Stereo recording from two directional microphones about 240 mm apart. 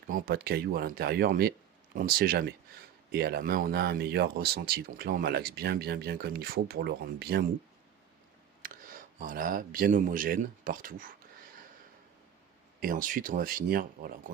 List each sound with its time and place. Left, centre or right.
0.1 s speech: right
8.6 s speech: right
12.8 s speech: right